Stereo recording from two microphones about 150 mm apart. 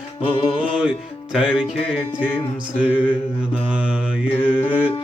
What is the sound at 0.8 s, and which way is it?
Music, 5° right (ahead or behind).